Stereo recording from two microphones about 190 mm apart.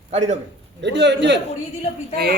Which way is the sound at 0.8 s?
65° right (ahead or behind).